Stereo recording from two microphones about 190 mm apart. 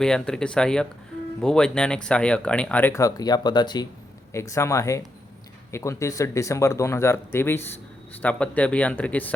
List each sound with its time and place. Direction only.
0.0 s speech: 5° left (ahead or behind)